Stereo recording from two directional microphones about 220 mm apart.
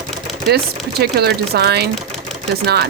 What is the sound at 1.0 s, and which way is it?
Speech, 45° right (ahead or behind).